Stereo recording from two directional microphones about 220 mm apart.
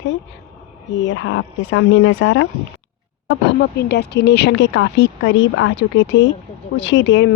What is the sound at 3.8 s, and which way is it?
Speech, 50° left (ahead or behind).